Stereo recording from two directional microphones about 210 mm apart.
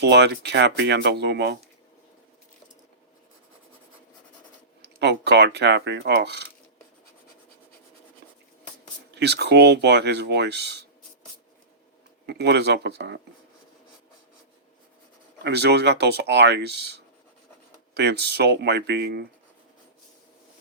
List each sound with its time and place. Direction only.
0.0 s speech: 55° right (ahead or behind)
4.9 s speech: 55° right (ahead or behind)
9.1 s speech: 55° right (ahead or behind)
12.2 s speech: 55° right (ahead or behind)
15.4 s speech: 55° right (ahead or behind)
17.9 s speech: 50° right (ahead or behind)